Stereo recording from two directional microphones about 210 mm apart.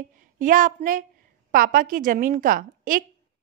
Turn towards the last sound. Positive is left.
turn(degrees=-40)  # may be behind; listen again after turning